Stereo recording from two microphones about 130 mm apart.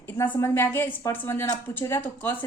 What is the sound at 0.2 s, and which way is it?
A woman's voice, 20° left (ahead or behind).